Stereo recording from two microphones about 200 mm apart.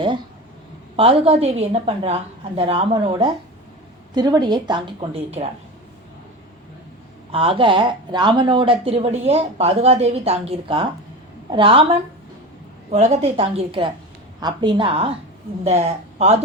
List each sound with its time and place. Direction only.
0.9 s a woman's voice: 30° right (ahead or behind)
7.3 s speech: 25° right (ahead or behind)
12.9 s a woman's voice: 35° right (ahead or behind)